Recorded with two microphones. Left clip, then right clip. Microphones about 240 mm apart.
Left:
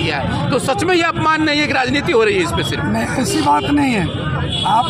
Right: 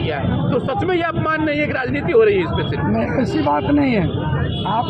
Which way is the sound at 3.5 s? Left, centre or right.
Centre.